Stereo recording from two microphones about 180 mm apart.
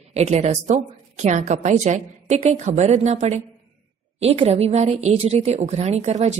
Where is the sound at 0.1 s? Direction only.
40° right (ahead or behind).